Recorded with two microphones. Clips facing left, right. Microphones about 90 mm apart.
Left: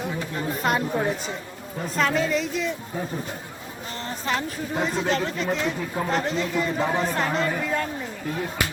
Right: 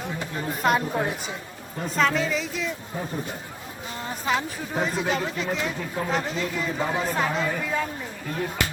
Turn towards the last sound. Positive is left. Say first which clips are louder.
# left 1 dB
turn(degrees=0)  # may be behind; listen again after turning